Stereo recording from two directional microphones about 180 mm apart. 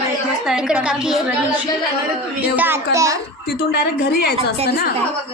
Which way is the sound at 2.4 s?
10° right (ahead or behind).